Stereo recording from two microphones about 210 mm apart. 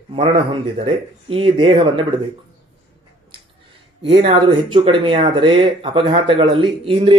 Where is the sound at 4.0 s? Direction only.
25° right (ahead or behind).